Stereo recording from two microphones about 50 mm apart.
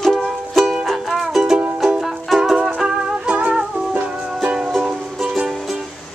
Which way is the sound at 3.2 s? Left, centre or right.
Right.